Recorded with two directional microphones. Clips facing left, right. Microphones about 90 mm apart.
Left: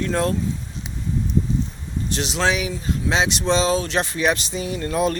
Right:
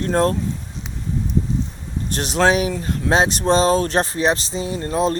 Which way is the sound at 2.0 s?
45° right (ahead or behind).